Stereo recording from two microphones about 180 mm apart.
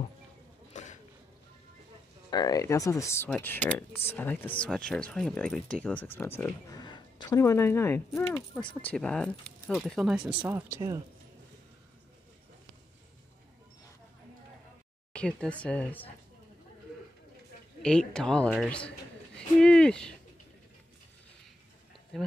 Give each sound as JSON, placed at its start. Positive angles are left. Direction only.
{"t": 2.3, "sound": "speech", "side_deg": 20}
{"t": 6.8, "sound": "speech", "side_deg": 25}
{"t": 15.1, "sound": "speech", "side_deg": 5}
{"t": 17.8, "sound": "speech", "side_deg": 5}
{"t": 22.1, "sound": "speech", "side_deg": 0}